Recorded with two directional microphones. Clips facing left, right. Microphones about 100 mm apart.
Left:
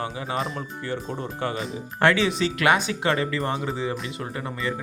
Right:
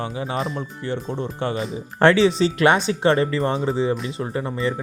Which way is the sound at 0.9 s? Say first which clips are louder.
Right 4 dB; 25° right (ahead or behind).